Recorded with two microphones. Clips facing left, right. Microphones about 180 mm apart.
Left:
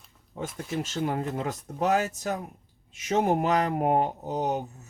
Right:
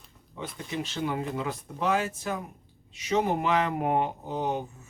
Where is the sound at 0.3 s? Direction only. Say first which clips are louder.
Left 2 dB; 45° left (ahead or behind).